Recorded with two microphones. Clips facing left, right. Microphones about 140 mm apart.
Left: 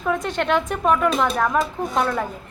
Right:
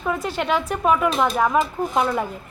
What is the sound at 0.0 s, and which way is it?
A woman's voice, 5° right (ahead or behind).